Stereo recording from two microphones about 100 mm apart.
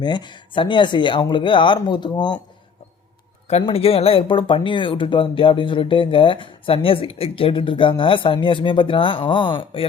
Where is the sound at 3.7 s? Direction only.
75° left (ahead or behind).